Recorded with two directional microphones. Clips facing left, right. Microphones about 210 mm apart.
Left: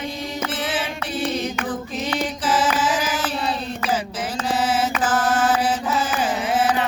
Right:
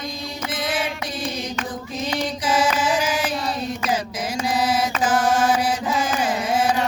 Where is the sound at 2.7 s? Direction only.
10° right (ahead or behind).